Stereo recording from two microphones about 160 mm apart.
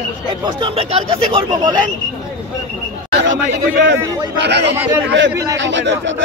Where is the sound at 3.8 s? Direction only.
90° right.